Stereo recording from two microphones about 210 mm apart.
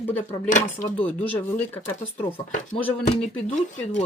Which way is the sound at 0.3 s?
35° left (ahead or behind).